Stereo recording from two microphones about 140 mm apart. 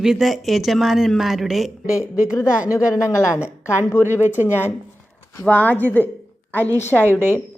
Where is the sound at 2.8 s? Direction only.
20° left (ahead or behind).